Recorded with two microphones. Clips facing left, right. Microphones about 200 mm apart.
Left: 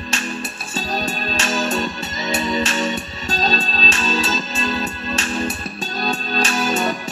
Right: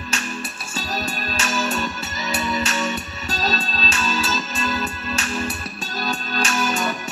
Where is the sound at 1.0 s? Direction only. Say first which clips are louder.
Left 3 dB; 30° left (ahead or behind).